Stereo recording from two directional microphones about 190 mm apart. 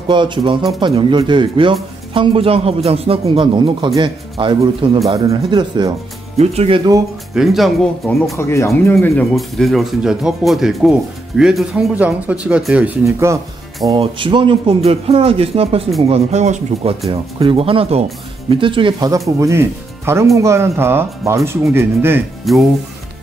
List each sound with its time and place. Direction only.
0.1 s speech: 25° right (ahead or behind)
6.3 s speech: 35° right (ahead or behind)
7.3 s speech: centre (ahead or behind)
8.4 s speech: 15° left (ahead or behind)
8.9 s speech: centre (ahead or behind); by 13.4 s 15° right (ahead or behind)
13.8 s speech: 25° right (ahead or behind)
22.4 s speech: centre (ahead or behind)